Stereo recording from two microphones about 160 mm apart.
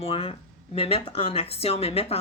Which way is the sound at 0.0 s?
40° left (ahead or behind).